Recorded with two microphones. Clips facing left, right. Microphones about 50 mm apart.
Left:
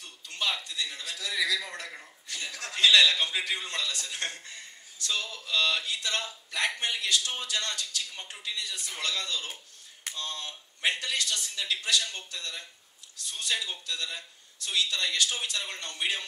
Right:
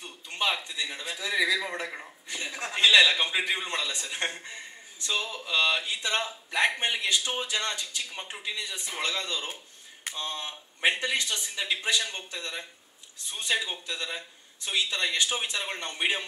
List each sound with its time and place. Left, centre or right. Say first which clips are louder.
0.0 s a man's voice: right 3 dB; right